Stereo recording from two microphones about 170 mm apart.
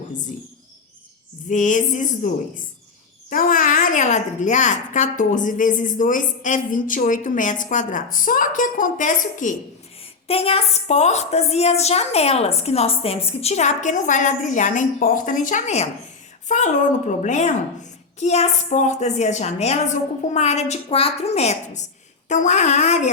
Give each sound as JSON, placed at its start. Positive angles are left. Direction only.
{"t": 1.5, "sound": "a woman's voice", "side_deg": 45}
{"t": 10.2, "sound": "a woman's voice", "side_deg": 35}